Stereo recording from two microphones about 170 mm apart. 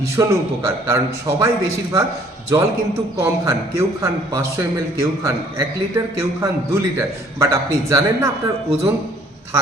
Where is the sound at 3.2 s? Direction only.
20° right (ahead or behind).